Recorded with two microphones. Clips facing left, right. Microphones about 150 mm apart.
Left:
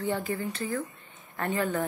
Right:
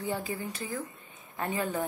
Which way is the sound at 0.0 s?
15° right (ahead or behind).